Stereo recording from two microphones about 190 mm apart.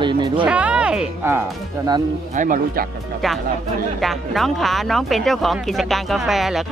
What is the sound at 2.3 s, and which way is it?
Speech, 45° right (ahead or behind).